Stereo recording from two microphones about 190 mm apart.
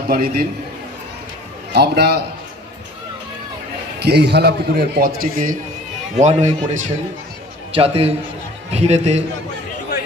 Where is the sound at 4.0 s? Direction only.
60° right (ahead or behind).